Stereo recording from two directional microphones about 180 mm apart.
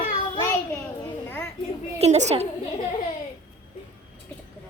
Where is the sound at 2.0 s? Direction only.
40° right (ahead or behind).